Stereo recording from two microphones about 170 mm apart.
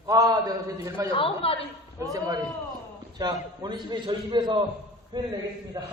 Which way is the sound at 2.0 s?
20° right (ahead or behind).